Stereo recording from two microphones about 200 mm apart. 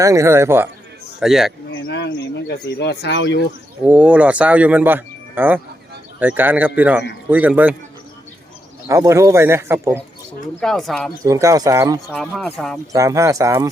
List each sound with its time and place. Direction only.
0.0 s speech: 15° right (ahead or behind)
1.7 s speech: 60° left (ahead or behind)
3.8 s speech: 5° right (ahead or behind)
8.9 s speech: 15° right (ahead or behind)
10.6 s speech: centre (ahead or behind)
11.2 s speech: 15° right (ahead or behind)
12.0 s speech: centre (ahead or behind)
12.9 s speech: 15° right (ahead or behind)